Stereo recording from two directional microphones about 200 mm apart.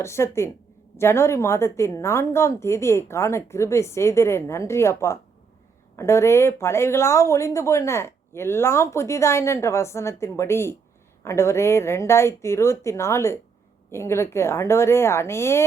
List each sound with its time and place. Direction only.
0.0 s speech: 15° left (ahead or behind)